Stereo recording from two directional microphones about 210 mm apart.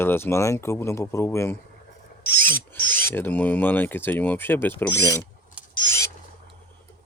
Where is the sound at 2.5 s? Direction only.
10° left (ahead or behind).